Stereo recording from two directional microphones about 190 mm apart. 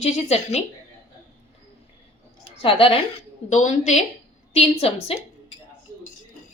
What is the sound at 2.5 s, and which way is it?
A woman's voice, 30° left (ahead or behind).